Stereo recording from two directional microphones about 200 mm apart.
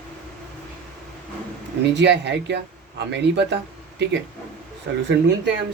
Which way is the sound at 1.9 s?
60° right (ahead or behind).